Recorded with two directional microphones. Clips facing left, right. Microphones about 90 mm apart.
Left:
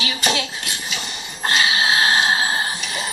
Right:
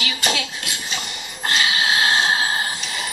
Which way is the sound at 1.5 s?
30° left (ahead or behind).